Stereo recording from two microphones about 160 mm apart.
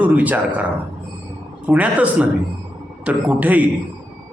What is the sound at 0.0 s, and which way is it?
Speech, 10° right (ahead or behind).